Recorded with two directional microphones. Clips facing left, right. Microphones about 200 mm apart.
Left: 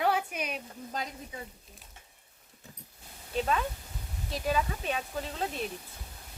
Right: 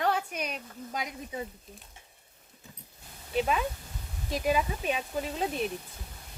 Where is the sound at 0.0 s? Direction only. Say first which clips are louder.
Even; 5° left (ahead or behind).